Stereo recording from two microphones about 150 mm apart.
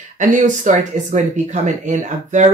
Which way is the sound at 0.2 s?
60° right (ahead or behind).